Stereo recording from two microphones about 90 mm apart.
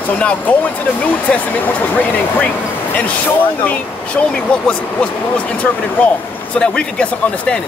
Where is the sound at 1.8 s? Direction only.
20° left (ahead or behind).